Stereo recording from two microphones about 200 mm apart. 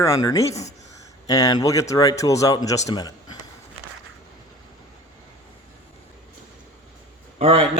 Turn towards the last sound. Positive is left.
turn(degrees=-30)  # may be behind; listen again after turning